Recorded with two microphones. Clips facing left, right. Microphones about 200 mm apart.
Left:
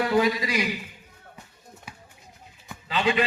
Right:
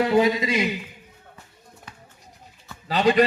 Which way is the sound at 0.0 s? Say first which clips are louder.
Right 3 dB; 25° right (ahead or behind).